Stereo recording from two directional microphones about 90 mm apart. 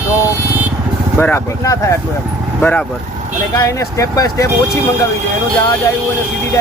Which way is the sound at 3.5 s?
35° left (ahead or behind).